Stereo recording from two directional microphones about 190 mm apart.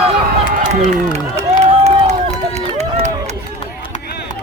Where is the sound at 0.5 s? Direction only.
40° right (ahead or behind).